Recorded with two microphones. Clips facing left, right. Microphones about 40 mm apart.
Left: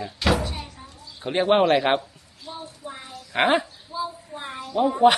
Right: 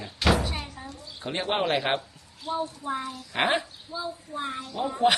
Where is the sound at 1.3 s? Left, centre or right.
Centre.